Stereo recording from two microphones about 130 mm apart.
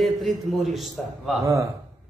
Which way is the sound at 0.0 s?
Centre (ahead or behind).